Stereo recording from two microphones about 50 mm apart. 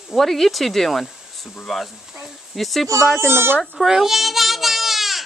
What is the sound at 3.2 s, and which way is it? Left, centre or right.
Speech, right.